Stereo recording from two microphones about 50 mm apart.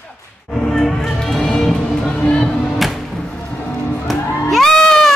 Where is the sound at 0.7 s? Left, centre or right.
Centre.